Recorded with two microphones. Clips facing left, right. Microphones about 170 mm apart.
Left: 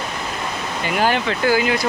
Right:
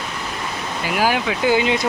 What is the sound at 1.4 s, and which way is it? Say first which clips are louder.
Speech: right 1 dB; 25° right (ahead or behind).